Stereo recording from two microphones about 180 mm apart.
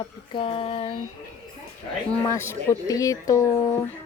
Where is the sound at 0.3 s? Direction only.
30° left (ahead or behind).